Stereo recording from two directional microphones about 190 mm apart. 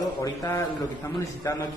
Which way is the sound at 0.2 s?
15° left (ahead or behind).